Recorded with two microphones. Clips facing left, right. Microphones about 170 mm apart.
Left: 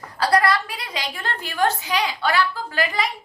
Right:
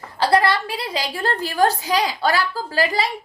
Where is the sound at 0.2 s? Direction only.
25° right (ahead or behind).